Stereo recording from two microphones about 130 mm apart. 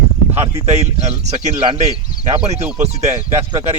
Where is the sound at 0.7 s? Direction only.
55° right (ahead or behind).